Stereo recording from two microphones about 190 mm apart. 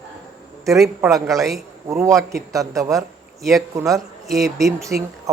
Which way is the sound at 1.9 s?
15° right (ahead or behind).